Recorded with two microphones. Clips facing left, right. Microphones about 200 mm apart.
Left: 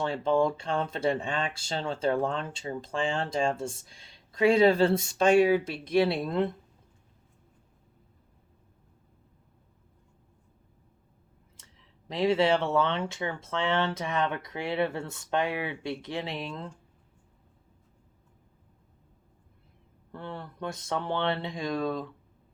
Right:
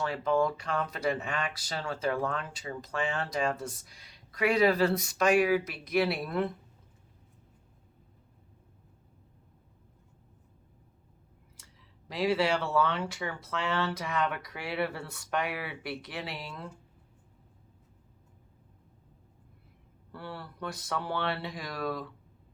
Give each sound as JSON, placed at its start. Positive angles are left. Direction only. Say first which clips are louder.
{"t": 0.0, "sound": "speech", "louder": "left 2 dB", "side_deg": 25}
{"t": 12.0, "sound": "speech", "louder": "left 4 dB", "side_deg": 25}
{"t": 20.3, "sound": "speech", "louder": "left 3 dB", "side_deg": 20}